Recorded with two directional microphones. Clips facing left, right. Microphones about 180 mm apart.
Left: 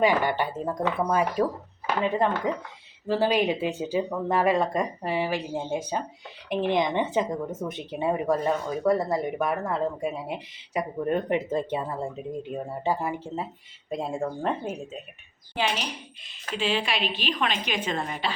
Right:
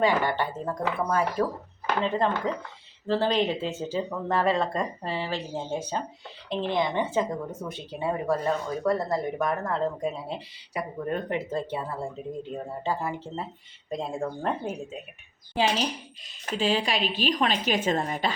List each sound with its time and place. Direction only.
0.0 s speech: 15° left (ahead or behind)
15.5 s a woman's voice: 35° right (ahead or behind)